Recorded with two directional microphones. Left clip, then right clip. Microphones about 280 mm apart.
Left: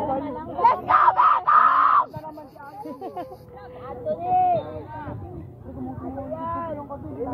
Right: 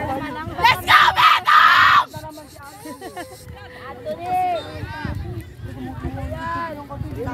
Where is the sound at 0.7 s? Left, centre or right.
Right.